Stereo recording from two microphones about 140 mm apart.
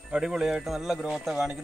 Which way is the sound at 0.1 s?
5° right (ahead or behind).